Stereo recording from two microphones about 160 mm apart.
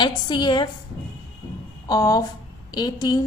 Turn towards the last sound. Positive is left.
turn(degrees=25)  # may be behind; listen again after turning